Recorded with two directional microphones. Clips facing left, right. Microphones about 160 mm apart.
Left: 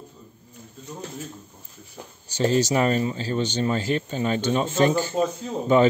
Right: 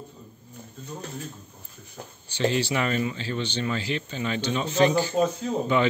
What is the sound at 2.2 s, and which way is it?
Speech, 40° left (ahead or behind).